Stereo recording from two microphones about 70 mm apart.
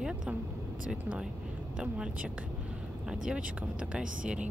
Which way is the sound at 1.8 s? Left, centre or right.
Centre.